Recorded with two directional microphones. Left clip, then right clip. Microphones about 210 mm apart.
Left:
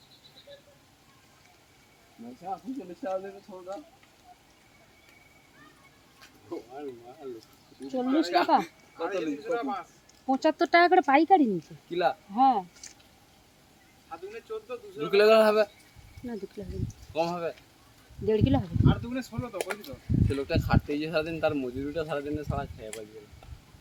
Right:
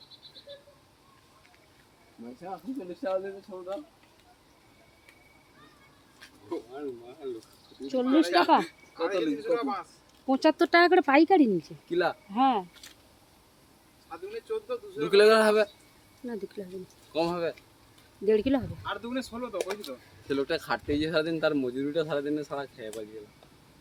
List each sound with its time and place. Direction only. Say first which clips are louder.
2.4 s speech: left 2 dB; 35° right (ahead or behind)
6.1 s a sound: right 3 dB; 35° right (ahead or behind)
7.2 s speech: right 4 dB; 35° right (ahead or behind)
10.2 s speech: right 1 dB; 5° right (ahead or behind)
11.9 s speech: left 1 dB; 35° right (ahead or behind)
12.3 s speech: left 3 dB; 10° right (ahead or behind)
12.8 s a sound: left 1 dB; 30° right (ahead or behind)
14.1 s speech: right 3 dB; 25° right (ahead or behind)
16.2 s speech: right 1 dB; centre (ahead or behind)
17.1 s speech: right 1 dB; 35° right (ahead or behind)
18.3 s speech: right 1 dB; 5° right (ahead or behind)
18.9 s speech: left 2 dB; 25° right (ahead or behind)